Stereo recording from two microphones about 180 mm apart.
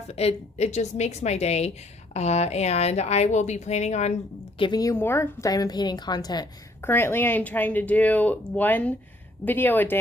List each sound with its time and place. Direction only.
0.1 s a woman's voice: 35° left (ahead or behind); by 10.0 s 10° left (ahead or behind)